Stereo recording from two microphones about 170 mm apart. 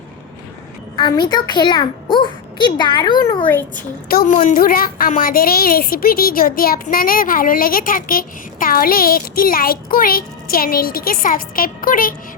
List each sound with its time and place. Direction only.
0.9 s a child's voice: 25° left (ahead or behind)
4.1 s a woman's voice: 55° left (ahead or behind)